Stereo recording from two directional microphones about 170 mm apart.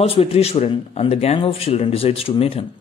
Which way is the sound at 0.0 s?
35° left (ahead or behind).